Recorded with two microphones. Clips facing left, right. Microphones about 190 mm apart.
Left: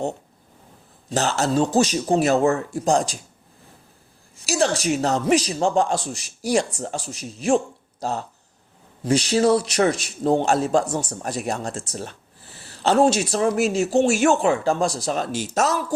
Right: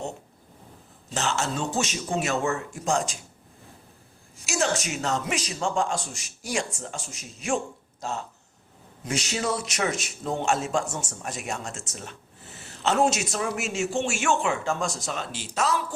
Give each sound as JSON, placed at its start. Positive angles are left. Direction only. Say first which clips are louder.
{"t": 1.1, "sound": "a man's voice", "louder": "left 7 dB", "side_deg": 35}
{"t": 4.4, "sound": "a man's voice", "louder": "left 6 dB", "side_deg": 35}